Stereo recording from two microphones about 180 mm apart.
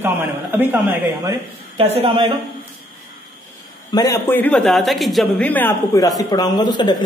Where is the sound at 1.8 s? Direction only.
30° right (ahead or behind).